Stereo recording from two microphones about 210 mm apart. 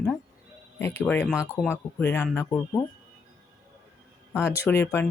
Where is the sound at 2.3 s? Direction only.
10° left (ahead or behind).